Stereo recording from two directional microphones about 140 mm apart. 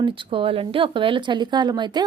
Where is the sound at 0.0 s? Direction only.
40° right (ahead or behind).